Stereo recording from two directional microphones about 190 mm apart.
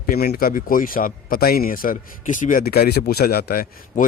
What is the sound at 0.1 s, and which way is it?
Speech, 50° left (ahead or behind).